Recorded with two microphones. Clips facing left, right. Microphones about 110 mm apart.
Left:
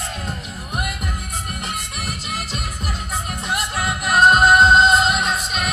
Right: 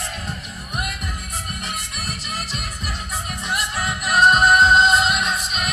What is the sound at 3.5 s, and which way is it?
Music, 25° left (ahead or behind).